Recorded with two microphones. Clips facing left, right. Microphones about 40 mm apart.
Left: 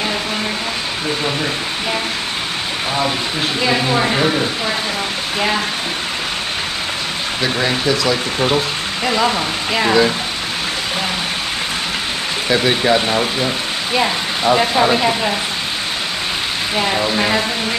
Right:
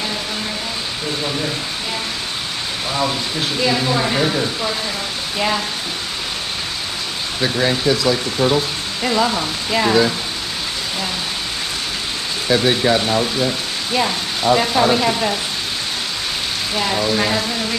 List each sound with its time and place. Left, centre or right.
3.6 s a woman's voice: left